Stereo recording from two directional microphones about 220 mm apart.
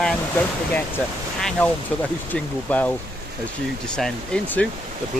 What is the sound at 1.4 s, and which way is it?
Speech, 5° left (ahead or behind).